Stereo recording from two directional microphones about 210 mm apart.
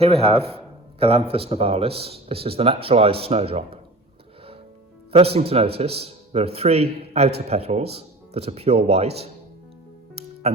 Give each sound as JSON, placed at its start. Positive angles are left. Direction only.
{"t": 0.0, "sound": "speech", "side_deg": -30}
{"t": 5.1, "sound": "speech", "side_deg": -25}
{"t": 10.5, "sound": "speech", "side_deg": -30}